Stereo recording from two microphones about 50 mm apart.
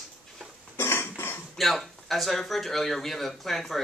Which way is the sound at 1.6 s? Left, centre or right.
Centre.